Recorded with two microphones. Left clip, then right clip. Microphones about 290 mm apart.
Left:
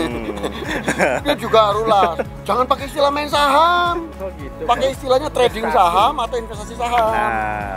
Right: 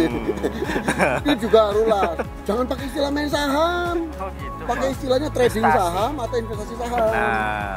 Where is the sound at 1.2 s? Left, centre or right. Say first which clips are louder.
Left 2 dB; left.